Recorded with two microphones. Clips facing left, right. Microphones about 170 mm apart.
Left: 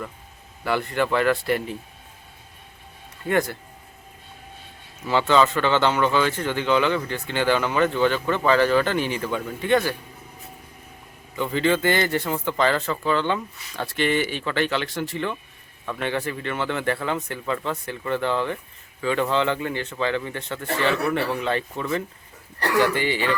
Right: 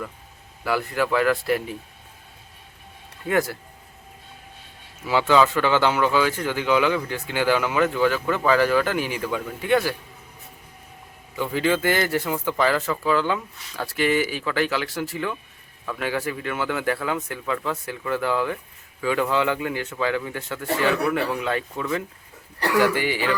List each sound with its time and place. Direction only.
0.6 s a man's voice: 5° right (ahead or behind)
3.2 s a man's voice: 5° right (ahead or behind)
5.0 s speech: 10° right (ahead or behind)
11.3 s a man's voice: 5° right (ahead or behind)